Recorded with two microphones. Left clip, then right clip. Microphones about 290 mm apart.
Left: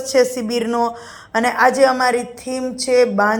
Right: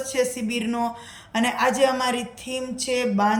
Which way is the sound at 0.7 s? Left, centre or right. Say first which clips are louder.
Left 8 dB; centre.